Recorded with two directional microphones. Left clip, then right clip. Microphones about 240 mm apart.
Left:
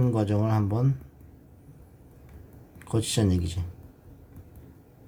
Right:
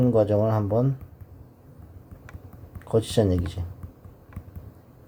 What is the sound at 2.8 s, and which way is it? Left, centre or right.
Speech, centre.